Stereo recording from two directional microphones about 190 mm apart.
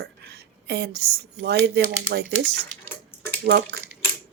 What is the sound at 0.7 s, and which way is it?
Speech, 60° right (ahead or behind).